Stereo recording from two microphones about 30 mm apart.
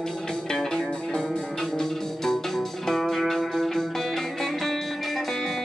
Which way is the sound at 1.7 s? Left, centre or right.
Centre.